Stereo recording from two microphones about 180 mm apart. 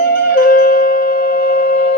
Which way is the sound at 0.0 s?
60° left (ahead or behind).